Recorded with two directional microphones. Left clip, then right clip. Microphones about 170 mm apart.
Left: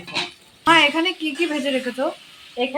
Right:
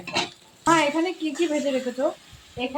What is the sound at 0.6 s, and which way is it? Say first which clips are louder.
A woman's voice: left 5 dB; centre (ahead or behind).